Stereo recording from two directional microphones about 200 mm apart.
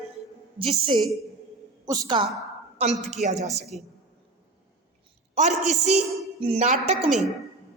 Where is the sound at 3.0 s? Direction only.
35° right (ahead or behind).